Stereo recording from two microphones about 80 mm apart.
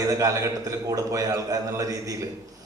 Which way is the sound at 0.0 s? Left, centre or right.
Right.